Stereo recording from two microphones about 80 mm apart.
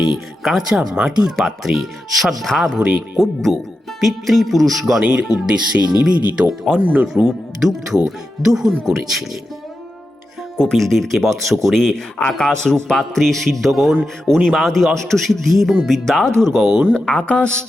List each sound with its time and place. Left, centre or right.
0.0 s speech: centre
2.7 s speech: centre
3.2 s speech: centre
7.1 s speech: centre
10.6 s speech: centre
16.9 s speech: centre